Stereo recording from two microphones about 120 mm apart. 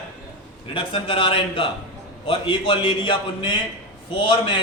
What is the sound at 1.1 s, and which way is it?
A man's voice, 45° left (ahead or behind).